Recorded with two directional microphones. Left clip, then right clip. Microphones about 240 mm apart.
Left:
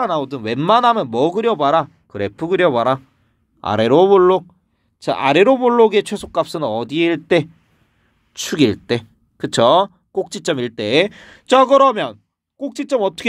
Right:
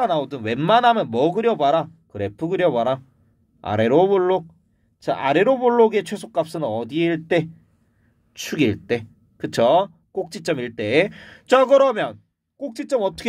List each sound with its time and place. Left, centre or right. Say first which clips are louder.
0.0 s speech: left 2 dB; left